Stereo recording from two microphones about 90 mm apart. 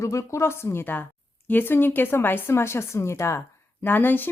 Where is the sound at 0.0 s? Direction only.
35° left (ahead or behind).